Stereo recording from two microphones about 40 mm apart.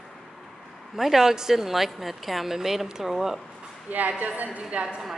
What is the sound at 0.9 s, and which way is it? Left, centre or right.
A woman's voice, centre.